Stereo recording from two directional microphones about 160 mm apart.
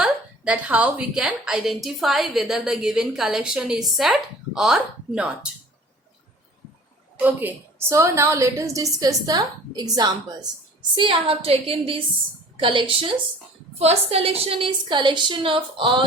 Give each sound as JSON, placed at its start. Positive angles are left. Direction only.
{"t": 0.0, "sound": "a woman's voice", "side_deg": -10}
{"t": 7.2, "sound": "a woman's voice", "side_deg": -10}